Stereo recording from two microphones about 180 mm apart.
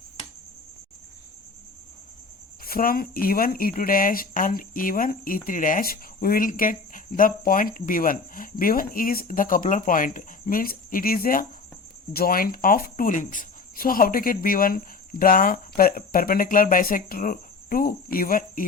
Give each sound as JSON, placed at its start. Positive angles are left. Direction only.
{"t": 2.6, "sound": "speech", "side_deg": 55}